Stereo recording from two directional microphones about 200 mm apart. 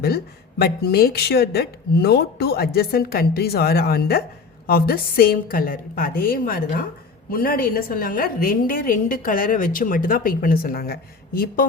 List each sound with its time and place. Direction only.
0.6 s a woman's voice: 50° left (ahead or behind)